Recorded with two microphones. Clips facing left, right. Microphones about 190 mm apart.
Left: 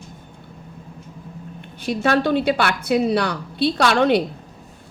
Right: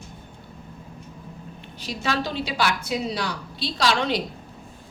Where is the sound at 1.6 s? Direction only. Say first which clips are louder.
Left 10 dB; 55° left (ahead or behind).